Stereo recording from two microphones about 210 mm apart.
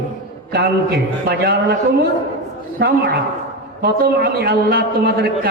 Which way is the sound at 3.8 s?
45° right (ahead or behind).